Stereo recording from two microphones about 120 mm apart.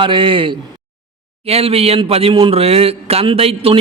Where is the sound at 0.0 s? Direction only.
45° right (ahead or behind).